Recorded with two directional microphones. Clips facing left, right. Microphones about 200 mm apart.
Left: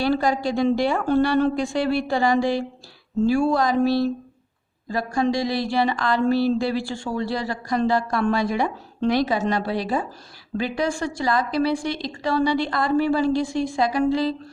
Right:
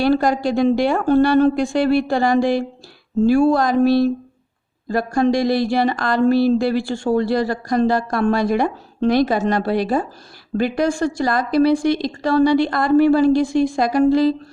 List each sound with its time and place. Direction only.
0.0 s speech: 55° right (ahead or behind)
6.7 s speech: 55° right (ahead or behind)